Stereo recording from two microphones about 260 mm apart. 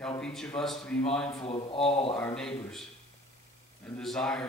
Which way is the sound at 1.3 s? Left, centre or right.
Left.